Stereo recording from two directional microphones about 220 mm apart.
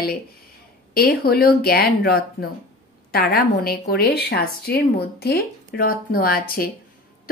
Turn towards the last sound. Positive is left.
turn(degrees=40)  # may be behind; listen again after turning